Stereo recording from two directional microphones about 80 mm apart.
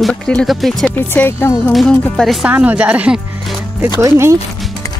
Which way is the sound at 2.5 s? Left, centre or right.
Centre.